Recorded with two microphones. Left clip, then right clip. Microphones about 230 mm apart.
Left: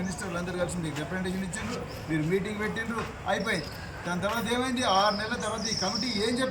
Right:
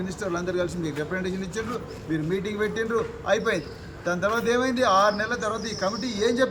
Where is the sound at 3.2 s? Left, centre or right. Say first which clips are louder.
Right 3 dB; centre.